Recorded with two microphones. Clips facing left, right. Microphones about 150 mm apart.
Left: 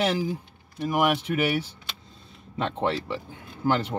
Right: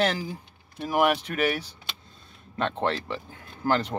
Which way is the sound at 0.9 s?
5° left (ahead or behind).